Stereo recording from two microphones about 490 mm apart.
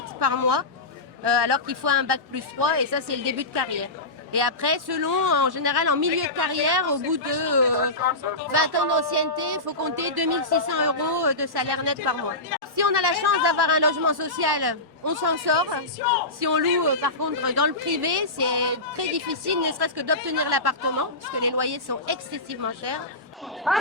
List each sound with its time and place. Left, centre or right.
0.2 s a man's voice: right
23.7 s speech: centre